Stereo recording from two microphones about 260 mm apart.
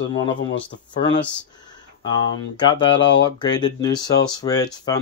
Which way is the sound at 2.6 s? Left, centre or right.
Centre.